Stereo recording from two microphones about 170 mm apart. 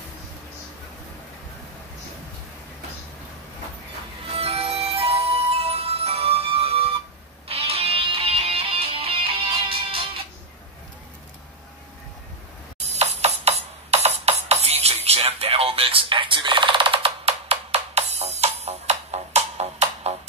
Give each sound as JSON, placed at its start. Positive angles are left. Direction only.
{"t": 4.3, "sound": "music", "side_deg": -35}
{"t": 12.7, "sound": "music", "side_deg": -40}